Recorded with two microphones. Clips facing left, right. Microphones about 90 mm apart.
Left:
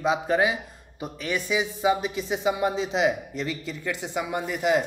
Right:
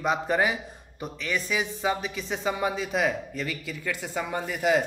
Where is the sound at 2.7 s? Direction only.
25° left (ahead or behind); by 4.8 s 5° left (ahead or behind).